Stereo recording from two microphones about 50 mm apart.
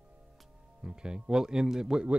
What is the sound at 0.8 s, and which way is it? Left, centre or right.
Speech, centre.